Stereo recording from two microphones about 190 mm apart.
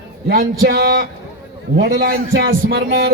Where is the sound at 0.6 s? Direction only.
55° right (ahead or behind).